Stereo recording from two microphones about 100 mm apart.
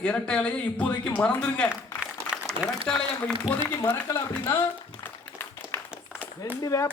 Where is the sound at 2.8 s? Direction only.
5° left (ahead or behind).